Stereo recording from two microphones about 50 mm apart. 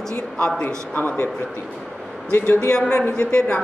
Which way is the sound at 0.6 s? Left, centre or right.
Left.